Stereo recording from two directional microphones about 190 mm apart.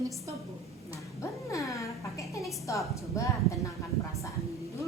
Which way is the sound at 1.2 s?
15° left (ahead or behind).